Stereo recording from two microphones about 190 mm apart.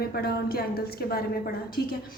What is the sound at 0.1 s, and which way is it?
A woman's voice, 55° left (ahead or behind).